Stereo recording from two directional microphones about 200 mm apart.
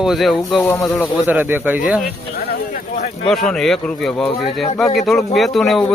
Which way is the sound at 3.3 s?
5° left (ahead or behind).